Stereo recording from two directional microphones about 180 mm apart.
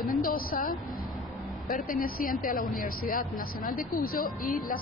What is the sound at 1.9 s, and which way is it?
Speech, 50° left (ahead or behind).